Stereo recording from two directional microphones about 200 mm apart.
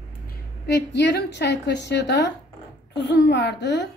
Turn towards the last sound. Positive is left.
turn(degrees=60)  # may be behind; listen again after turning